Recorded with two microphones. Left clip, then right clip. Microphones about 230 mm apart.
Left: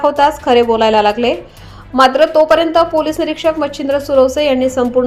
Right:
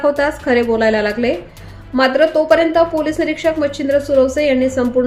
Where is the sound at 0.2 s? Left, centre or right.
Centre.